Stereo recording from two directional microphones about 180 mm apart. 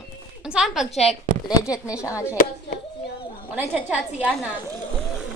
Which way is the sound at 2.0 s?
15° left (ahead or behind).